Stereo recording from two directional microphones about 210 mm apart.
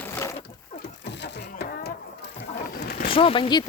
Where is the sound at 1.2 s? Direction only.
50° left (ahead or behind).